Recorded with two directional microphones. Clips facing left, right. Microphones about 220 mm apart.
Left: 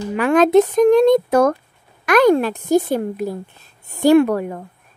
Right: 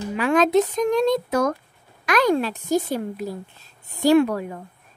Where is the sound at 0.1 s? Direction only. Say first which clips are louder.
Left 5 dB; 55° left (ahead or behind).